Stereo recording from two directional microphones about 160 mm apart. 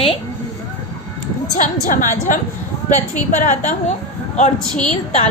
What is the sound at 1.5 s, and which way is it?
A woman's voice, 55° left (ahead or behind).